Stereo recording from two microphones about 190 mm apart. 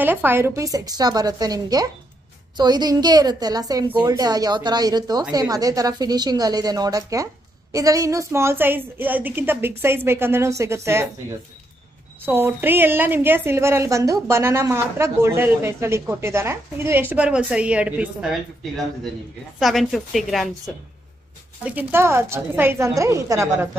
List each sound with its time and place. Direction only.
0.0 s a woman's voice: 10° right (ahead or behind)
12.3 s a woman's voice: 10° right (ahead or behind)
19.6 s a woman's voice: centre (ahead or behind); by 23.7 s 15° right (ahead or behind)